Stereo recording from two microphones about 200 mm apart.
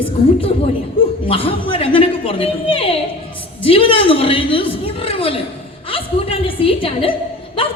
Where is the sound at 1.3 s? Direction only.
25° left (ahead or behind).